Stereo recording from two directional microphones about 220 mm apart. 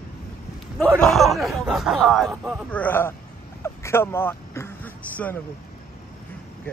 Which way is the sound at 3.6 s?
10° left (ahead or behind).